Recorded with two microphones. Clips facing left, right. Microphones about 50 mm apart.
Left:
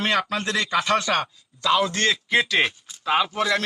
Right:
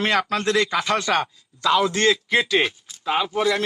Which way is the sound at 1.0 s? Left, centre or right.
Right.